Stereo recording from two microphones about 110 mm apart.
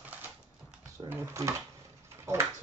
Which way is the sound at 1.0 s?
25° right (ahead or behind).